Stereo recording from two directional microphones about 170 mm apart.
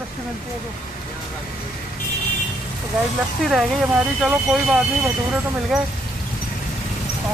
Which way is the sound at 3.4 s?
Centre (ahead or behind).